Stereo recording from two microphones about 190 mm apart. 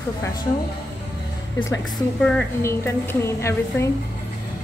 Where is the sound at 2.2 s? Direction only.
5° left (ahead or behind).